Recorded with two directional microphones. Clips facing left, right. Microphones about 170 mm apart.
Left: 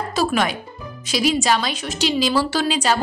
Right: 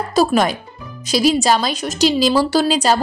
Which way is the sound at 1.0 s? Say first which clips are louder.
Right 4 dB; 35° right (ahead or behind).